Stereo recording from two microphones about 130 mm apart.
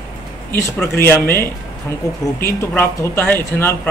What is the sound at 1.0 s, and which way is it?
Speech, 15° left (ahead or behind).